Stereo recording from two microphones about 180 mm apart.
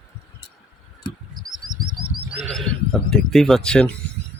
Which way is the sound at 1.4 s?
20° right (ahead or behind).